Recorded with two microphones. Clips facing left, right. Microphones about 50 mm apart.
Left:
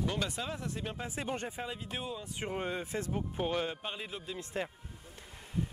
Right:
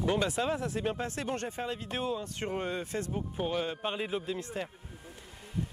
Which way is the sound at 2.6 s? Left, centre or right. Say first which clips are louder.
Right 2 dB; left.